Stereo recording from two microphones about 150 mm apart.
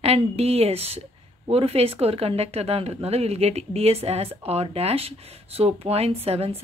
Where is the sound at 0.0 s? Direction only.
45° right (ahead or behind).